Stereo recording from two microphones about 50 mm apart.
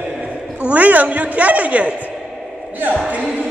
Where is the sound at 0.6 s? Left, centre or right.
Right.